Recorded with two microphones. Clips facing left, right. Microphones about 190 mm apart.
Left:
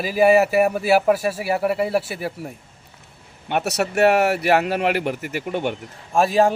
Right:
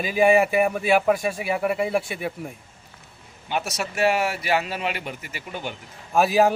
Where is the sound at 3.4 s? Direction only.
65° left (ahead or behind).